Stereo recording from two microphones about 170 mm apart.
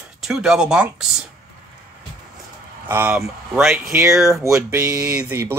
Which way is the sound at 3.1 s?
Centre (ahead or behind).